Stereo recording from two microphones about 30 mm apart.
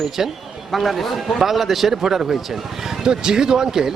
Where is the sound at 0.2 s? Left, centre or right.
Centre.